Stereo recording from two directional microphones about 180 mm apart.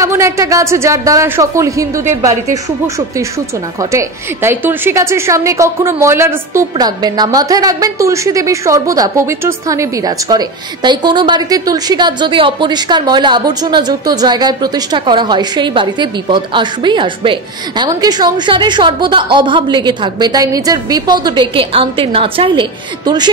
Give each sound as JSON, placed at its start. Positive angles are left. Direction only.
{"t": 0.0, "sound": "speech", "side_deg": -15}
{"t": 3.9, "sound": "a woman's voice", "side_deg": -15}